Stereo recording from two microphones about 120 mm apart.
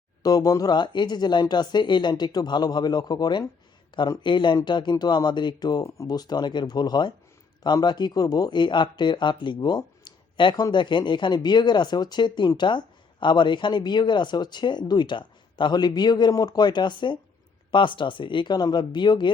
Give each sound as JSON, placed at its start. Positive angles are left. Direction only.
{"t": 0.2, "sound": "speech", "side_deg": 30}